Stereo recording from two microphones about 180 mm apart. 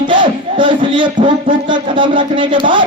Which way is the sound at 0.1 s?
25° right (ahead or behind).